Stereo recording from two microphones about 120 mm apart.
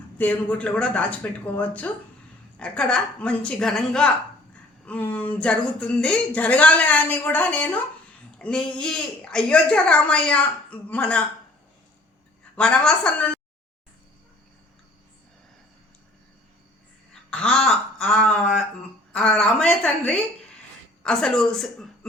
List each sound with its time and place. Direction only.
0.2 s speech: 10° left (ahead or behind)
12.5 s speech: 10° left (ahead or behind)
17.3 s speech: 5° left (ahead or behind)